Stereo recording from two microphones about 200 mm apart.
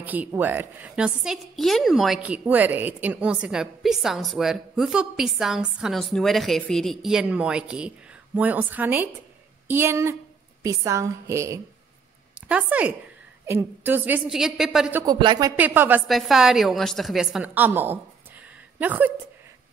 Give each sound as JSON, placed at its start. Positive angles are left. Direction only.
{"t": 0.0, "sound": "a woman's voice", "side_deg": -10}
{"t": 15.0, "sound": "speech", "side_deg": -20}
{"t": 15.5, "sound": "a woman's voice", "side_deg": -10}